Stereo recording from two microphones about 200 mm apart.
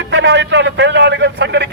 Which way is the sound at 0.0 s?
65° right (ahead or behind).